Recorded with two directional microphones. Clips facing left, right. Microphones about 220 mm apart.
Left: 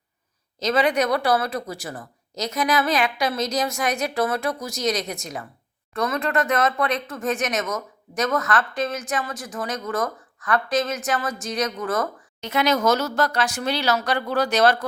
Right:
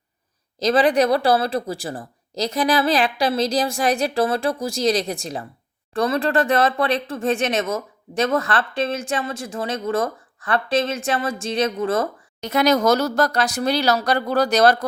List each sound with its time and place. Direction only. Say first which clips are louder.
0.6 s speech: right 4 dB; 35° right (ahead or behind)
12.4 s speech: right 4 dB; 40° right (ahead or behind)